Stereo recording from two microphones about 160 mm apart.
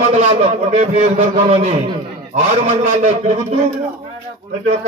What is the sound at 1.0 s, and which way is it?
Speech, 45° right (ahead or behind).